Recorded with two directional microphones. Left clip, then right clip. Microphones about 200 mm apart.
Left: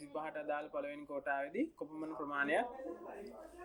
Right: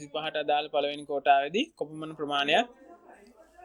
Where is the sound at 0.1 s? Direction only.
45° right (ahead or behind).